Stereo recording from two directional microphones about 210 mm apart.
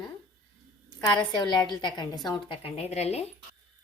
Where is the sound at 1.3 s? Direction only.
20° left (ahead or behind).